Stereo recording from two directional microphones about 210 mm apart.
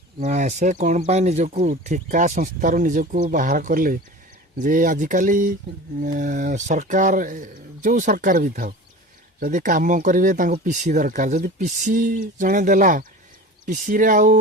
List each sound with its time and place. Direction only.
0.2 s speech: 35° right (ahead or behind)